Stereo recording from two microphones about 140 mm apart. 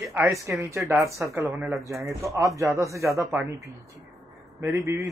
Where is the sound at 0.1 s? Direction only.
15° right (ahead or behind).